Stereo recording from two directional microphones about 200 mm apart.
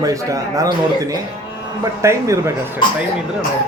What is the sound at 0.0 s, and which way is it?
A man's voice, 15° right (ahead or behind).